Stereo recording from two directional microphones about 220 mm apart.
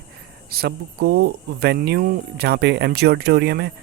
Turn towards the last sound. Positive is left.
turn(degrees=-50)  # may be behind; listen again after turning